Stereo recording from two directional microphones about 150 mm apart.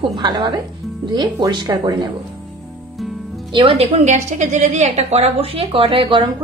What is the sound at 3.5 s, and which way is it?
A woman's voice, 40° right (ahead or behind).